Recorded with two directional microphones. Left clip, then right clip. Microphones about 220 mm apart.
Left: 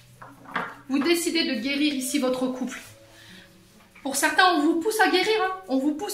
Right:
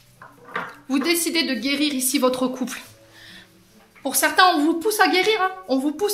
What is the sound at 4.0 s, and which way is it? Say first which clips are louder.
A man's voice: right 4 dB; 45° right (ahead or behind).